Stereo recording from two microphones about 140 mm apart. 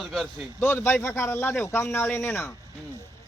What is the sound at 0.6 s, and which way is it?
Speech, 15° left (ahead or behind).